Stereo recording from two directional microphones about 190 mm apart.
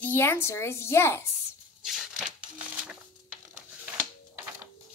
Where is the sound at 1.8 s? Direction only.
Centre (ahead or behind).